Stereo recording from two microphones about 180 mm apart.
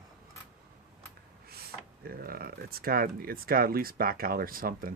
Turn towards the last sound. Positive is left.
turn(degrees=-55)  # may be behind; listen again after turning